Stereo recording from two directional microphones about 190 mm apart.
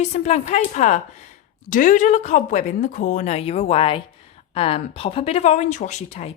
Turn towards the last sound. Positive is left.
turn(degrees=35)  # may be behind; listen again after turning